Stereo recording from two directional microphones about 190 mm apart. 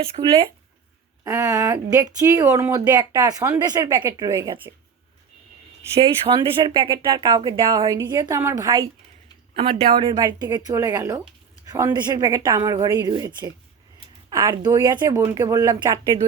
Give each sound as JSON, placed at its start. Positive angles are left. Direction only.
{"t": 0.0, "sound": "speech", "side_deg": -30}
{"t": 1.2, "sound": "speech", "side_deg": -15}
{"t": 5.9, "sound": "speech", "side_deg": -25}